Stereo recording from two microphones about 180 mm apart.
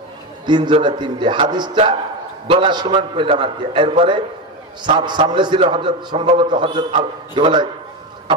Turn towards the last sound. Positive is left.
turn(degrees=-25)  # may be behind; listen again after turning